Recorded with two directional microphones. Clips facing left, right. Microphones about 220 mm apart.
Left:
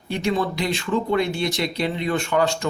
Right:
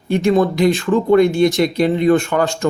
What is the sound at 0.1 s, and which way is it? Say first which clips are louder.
Speech: right 9 dB; 45° right (ahead or behind).